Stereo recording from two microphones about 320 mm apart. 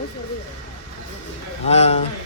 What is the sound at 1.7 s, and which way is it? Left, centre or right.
Speech, centre.